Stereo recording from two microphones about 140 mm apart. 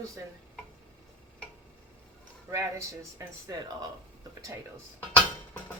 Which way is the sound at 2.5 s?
20° right (ahead or behind).